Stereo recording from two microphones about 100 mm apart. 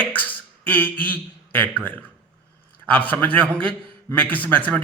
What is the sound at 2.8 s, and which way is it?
A man's voice, 15° left (ahead or behind).